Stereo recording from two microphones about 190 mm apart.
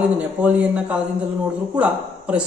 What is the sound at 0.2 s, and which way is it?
A man's voice, 5° right (ahead or behind).